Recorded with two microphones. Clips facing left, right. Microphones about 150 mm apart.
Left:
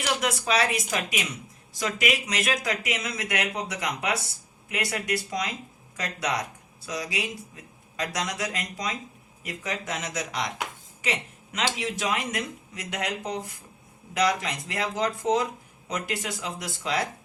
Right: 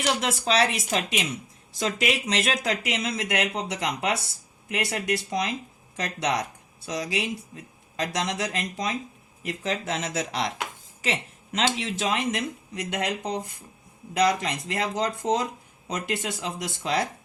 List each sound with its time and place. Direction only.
0.0 s speech: 30° right (ahead or behind)
11.0 s a sound: 30° right (ahead or behind)
11.8 s speech: 25° right (ahead or behind)